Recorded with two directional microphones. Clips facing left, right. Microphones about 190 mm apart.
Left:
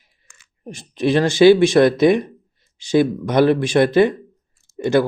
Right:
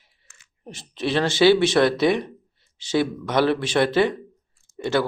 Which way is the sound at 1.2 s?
15° left (ahead or behind).